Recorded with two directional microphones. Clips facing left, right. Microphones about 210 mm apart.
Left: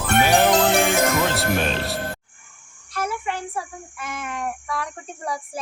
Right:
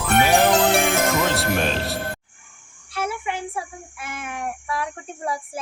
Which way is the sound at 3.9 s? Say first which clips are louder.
Left 2 dB; 5° right (ahead or behind).